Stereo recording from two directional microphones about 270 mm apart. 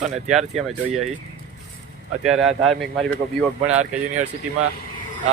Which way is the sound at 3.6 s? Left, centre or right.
Right.